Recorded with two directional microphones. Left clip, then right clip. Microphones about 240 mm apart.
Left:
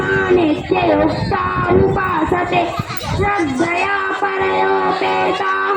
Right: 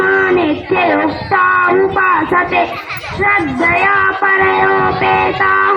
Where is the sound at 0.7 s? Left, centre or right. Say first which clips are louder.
Right 2 dB; right.